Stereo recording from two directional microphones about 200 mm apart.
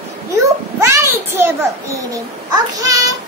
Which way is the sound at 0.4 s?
15° right (ahead or behind).